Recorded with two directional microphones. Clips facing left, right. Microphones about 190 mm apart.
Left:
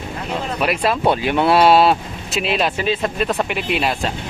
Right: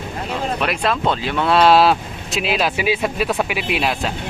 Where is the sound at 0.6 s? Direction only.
5° left (ahead or behind).